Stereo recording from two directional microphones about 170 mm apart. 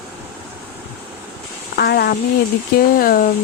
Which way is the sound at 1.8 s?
70° left (ahead or behind).